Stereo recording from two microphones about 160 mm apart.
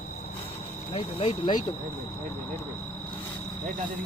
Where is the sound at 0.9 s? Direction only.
35° left (ahead or behind).